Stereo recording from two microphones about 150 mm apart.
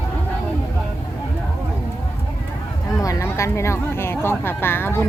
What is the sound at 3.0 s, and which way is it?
Speech, 20° left (ahead or behind).